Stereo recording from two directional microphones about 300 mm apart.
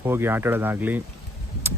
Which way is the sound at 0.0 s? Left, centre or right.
Centre.